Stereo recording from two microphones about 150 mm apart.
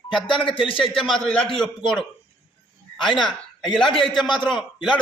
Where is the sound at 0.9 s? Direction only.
Centre (ahead or behind).